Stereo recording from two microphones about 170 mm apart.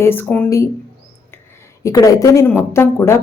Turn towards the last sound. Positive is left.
turn(degrees=15)  # may be behind; listen again after turning